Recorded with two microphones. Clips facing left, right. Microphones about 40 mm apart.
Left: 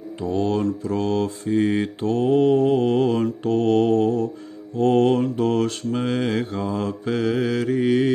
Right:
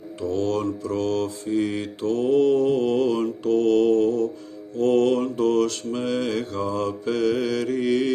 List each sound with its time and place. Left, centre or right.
0.2 s mantra: centre
1.4 s mantra: left; by 8.1 s centre